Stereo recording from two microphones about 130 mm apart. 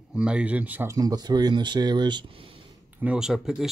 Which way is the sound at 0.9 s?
30° right (ahead or behind).